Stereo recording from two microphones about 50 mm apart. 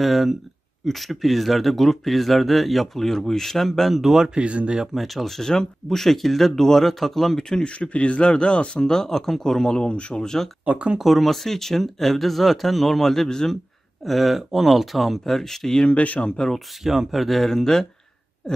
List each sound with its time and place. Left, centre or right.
0.0 s speech: centre
4.4 s speech: right
4.9 s speech: centre
10.6 s speech: right
11.0 s speech: centre
14.0 s speech: centre
15.8 s speech: left
16.5 s speech: centre